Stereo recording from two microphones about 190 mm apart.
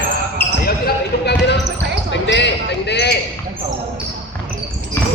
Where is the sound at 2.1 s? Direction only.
70° left (ahead or behind).